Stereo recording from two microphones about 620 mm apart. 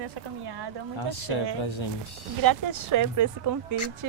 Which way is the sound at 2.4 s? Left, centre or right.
Right.